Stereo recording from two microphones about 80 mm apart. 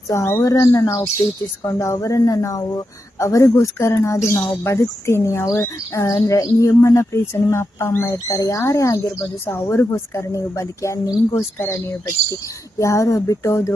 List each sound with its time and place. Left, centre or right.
0.1 s speech: left
10.2 s speech: left